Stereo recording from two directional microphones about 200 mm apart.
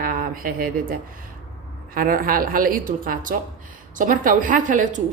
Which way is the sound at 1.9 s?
45° right (ahead or behind).